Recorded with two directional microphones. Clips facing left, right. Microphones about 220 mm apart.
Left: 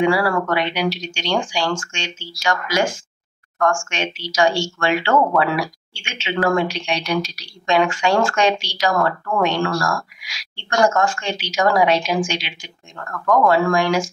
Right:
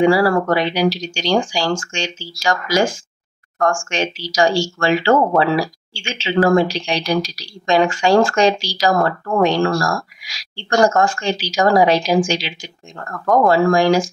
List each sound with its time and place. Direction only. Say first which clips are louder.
0.0 s speech: right 4 dB; 35° right (ahead or behind)